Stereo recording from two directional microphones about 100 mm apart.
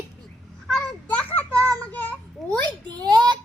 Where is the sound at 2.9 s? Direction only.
45° right (ahead or behind).